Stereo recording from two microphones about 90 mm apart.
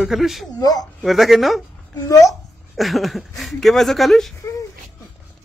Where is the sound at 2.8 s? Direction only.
Centre (ahead or behind).